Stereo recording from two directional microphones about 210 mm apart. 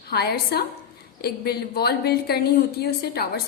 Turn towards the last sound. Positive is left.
turn(degrees=50)  # may be behind; listen again after turning